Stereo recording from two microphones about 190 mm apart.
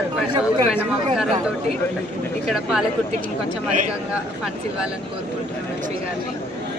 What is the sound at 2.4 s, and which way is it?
Speech, centre (ahead or behind).